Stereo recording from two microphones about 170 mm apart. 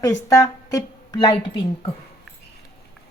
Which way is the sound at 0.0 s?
20° left (ahead or behind).